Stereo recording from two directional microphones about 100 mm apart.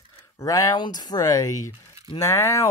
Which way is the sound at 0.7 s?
45° left (ahead or behind).